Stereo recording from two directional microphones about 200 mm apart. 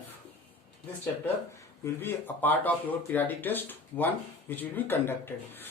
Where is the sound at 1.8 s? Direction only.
10° left (ahead or behind).